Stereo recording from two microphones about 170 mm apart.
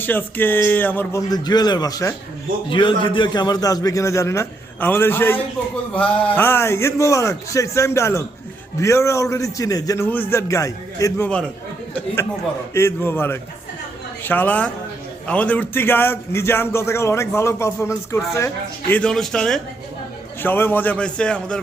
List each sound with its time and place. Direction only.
0.0 s a man's voice: 10° left (ahead or behind)
1.3 s a man's voice: 25° left (ahead or behind)
12.7 s a man's voice: 15° left (ahead or behind)